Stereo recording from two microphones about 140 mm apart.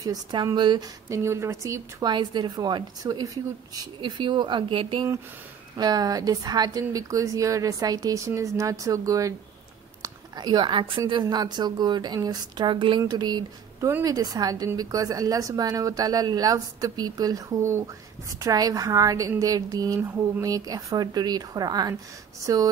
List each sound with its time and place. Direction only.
0.0 s speech: 30° right (ahead or behind)
1.0 s a woman's voice: 20° right (ahead or behind)